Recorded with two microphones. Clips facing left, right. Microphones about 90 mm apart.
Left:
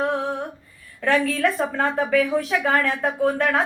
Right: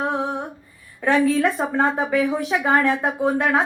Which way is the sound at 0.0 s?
15° right (ahead or behind).